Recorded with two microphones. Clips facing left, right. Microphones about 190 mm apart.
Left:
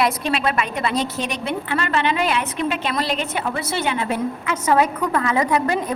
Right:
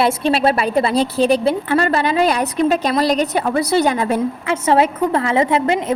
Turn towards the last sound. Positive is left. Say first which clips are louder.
# right 4 dB
turn(degrees=-25)  # may be behind; listen again after turning